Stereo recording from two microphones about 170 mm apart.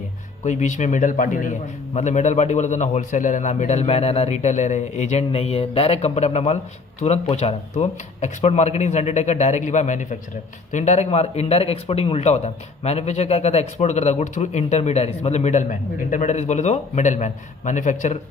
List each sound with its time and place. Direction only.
0.4 s a man's voice: 45° left (ahead or behind)